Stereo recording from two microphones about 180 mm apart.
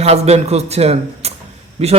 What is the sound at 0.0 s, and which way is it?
A man's voice, 35° right (ahead or behind).